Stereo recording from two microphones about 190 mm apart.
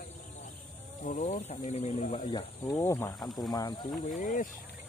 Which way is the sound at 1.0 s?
40° left (ahead or behind).